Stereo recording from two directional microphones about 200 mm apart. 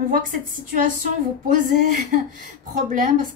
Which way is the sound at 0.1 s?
45° right (ahead or behind).